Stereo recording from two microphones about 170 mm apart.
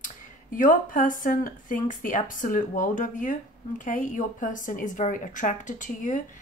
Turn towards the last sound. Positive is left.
turn(degrees=50)  # may be behind; listen again after turning